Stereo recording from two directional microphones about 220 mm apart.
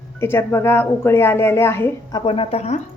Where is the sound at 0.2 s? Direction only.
10° left (ahead or behind); by 2.8 s 30° left (ahead or behind).